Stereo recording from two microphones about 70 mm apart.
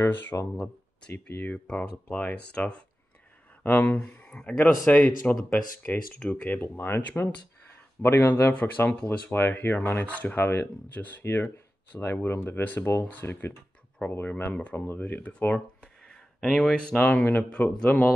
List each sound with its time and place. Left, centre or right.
0.0 s speech: left
1.2 s speech: centre
8.0 s speech: left
11.2 s speech: left
15.8 s a sound: centre
16.7 s speech: centre